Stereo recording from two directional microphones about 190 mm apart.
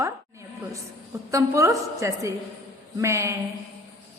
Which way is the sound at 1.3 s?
15° right (ahead or behind).